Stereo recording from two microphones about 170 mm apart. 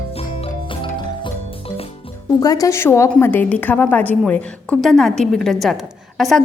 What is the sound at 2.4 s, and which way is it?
A woman's voice, 20° left (ahead or behind).